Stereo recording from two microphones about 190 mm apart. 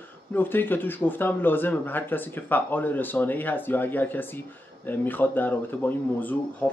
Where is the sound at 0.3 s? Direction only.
10° left (ahead or behind).